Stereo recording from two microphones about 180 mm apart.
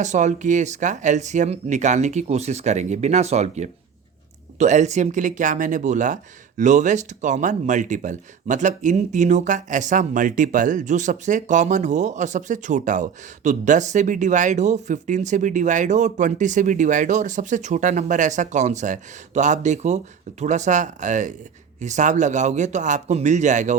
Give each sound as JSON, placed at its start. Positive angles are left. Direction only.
{"t": 0.0, "sound": "speech", "side_deg": -40}